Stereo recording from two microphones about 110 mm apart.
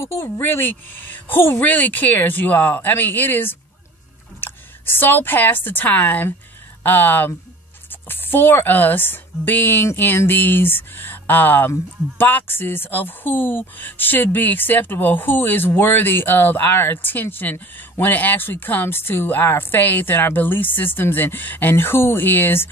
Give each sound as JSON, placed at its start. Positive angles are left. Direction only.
{"t": 0.0, "sound": "a woman's voice", "side_deg": 25}